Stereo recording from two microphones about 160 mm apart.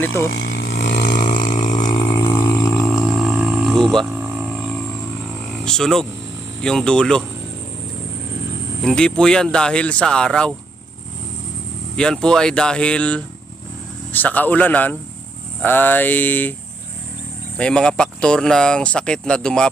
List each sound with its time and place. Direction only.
0.0 s mantra: 15° left (ahead or behind)
0.3 s vehicle: 90° left
1.2 s burping: 55° left (ahead or behind)
2.1 s burping: 15° left (ahead or behind)
3.2 s a sound: 5° right (ahead or behind)
5.6 s speech: 5° left (ahead or behind)
8.8 s speech: 5° left (ahead or behind)
11.9 s speech: 5° left (ahead or behind)
14.1 s mantra: 10° left (ahead or behind)
17.6 s speech: 5° left (ahead or behind)